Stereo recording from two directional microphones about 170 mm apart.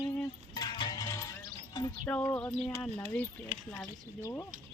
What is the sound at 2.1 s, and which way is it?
Speech, 10° left (ahead or behind).